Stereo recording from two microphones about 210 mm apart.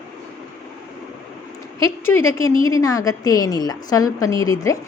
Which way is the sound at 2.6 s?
15° left (ahead or behind).